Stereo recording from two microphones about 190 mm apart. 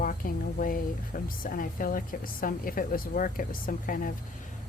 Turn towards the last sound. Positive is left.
turn(degrees=45)  # may be behind; listen again after turning